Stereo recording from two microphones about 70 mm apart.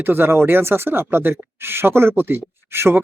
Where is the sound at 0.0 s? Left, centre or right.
Right.